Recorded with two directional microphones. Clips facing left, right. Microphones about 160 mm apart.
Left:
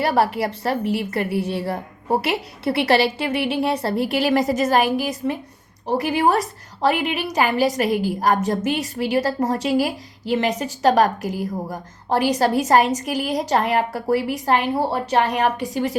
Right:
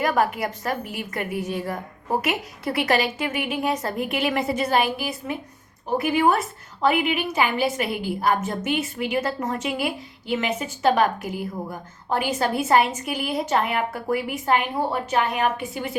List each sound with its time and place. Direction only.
0.0 s a woman's voice: 35° left (ahead or behind)